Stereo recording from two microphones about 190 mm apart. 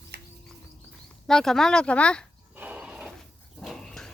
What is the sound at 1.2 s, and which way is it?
Speech, centre (ahead or behind).